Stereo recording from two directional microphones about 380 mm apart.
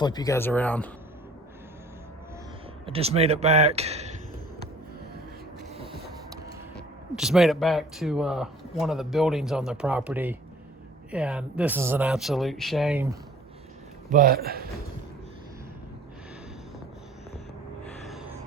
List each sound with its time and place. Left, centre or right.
0.0 s speech: centre
2.8 s speech: centre
6.7 s speech: centre
14.1 s a man's voice: right
18.0 s music: centre